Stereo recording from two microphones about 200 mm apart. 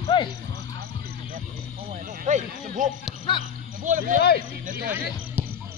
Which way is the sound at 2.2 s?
40° right (ahead or behind).